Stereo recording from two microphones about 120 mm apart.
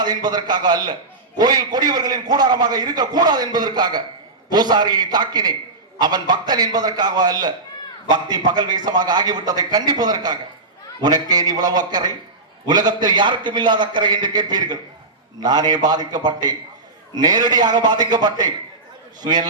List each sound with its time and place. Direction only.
0.0 s a man's voice: 35° right (ahead or behind)